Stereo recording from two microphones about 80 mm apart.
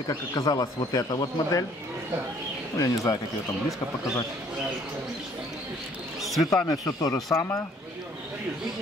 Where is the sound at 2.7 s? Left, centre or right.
Left.